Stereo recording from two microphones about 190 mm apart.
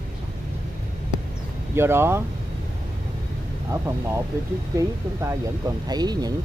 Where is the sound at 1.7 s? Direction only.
15° right (ahead or behind).